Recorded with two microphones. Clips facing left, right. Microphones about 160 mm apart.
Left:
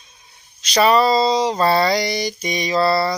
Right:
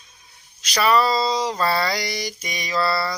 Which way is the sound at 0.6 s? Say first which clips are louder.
Left 4 dB; 25° left (ahead or behind).